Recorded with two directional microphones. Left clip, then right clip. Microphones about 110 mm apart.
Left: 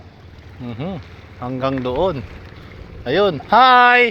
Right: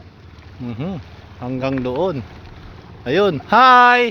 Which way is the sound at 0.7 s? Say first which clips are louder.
Even; 65° right (ahead or behind).